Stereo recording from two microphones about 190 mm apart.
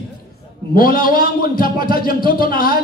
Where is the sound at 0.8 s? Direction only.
50° left (ahead or behind).